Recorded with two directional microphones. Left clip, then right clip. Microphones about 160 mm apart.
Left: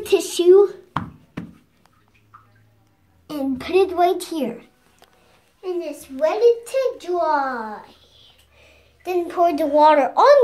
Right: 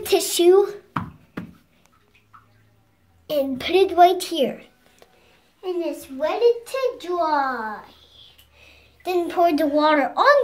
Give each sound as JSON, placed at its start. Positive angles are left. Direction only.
{"t": 0.0, "sound": "speech", "side_deg": -40}
{"t": 3.3, "sound": "a child's voice", "side_deg": -25}
{"t": 5.6, "sound": "a child's voice", "side_deg": -10}
{"t": 6.1, "sound": "a child's voice", "side_deg": 10}
{"t": 9.1, "sound": "speech", "side_deg": -35}
{"t": 9.8, "sound": "a child's voice", "side_deg": 10}